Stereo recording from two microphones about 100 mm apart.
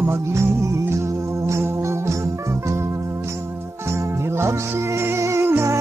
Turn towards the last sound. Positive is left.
turn(degrees=-25)  # may be behind; listen again after turning